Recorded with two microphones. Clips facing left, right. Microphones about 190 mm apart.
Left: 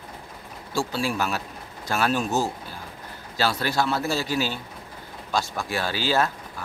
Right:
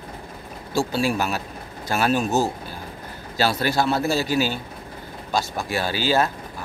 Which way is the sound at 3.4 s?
10° right (ahead or behind).